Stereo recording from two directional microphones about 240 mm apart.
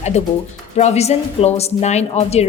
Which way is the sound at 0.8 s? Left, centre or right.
Left.